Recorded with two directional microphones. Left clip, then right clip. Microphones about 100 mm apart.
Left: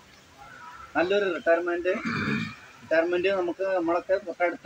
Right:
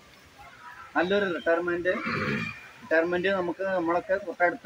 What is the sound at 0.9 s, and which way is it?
Speech, 15° right (ahead or behind).